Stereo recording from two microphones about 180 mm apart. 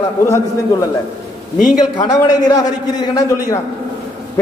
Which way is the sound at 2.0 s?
20° left (ahead or behind).